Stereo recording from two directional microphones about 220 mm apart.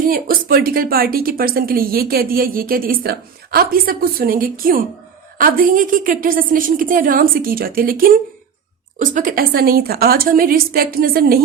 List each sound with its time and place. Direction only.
0.0 s a woman's voice: 40° right (ahead or behind)